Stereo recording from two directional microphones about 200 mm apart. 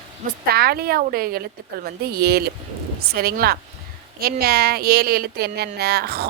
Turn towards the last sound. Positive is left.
turn(degrees=-50)  # may be behind; listen again after turning